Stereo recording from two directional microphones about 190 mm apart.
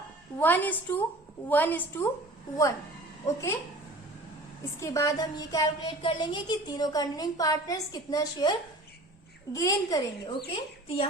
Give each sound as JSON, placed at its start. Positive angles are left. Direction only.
{"t": 0.3, "sound": "a woman's voice", "side_deg": 10}
{"t": 3.2, "sound": "a woman's voice", "side_deg": 15}
{"t": 4.8, "sound": "a woman's voice", "side_deg": 15}
{"t": 10.5, "sound": "a woman's voice", "side_deg": 30}